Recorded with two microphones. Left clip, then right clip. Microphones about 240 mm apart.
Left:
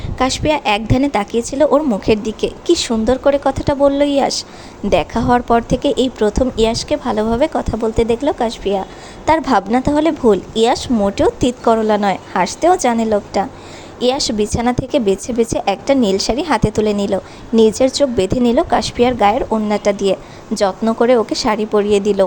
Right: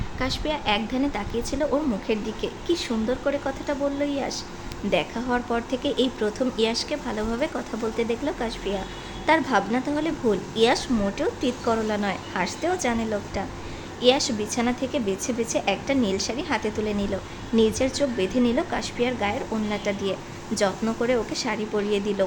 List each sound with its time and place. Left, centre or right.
0.2 s a woman's voice: left